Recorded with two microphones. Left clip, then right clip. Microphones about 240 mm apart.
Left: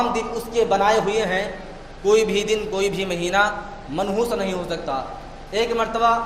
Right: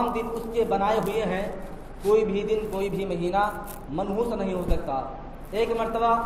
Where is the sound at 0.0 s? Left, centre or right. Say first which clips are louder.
Left 4 dB; left.